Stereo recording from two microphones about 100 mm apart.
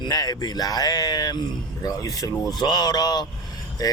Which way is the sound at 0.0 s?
40° left (ahead or behind).